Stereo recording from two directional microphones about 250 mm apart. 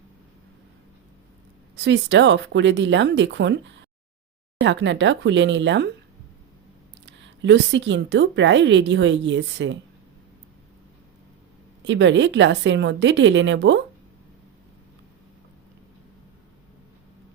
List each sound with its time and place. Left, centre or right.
1.7 s a woman's voice: right
7.0 s a woman's voice: right
11.8 s a woman's voice: right